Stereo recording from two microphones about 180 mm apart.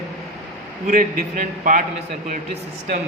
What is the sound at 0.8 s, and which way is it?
Speech, 45° right (ahead or behind).